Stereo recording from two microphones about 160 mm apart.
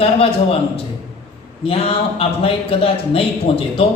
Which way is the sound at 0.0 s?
35° left (ahead or behind).